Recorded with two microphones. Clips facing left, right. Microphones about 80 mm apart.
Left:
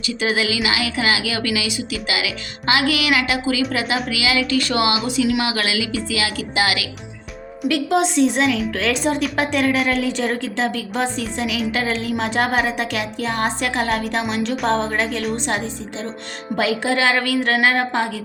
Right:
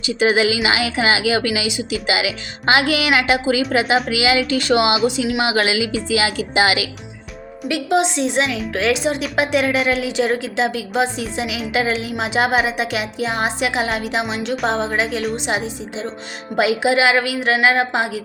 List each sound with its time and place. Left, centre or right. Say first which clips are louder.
0.3 s a woman's voice: right 4 dB; right
7.6 s a woman's voice: even; centre
16.6 s a woman's voice: right 4 dB; centre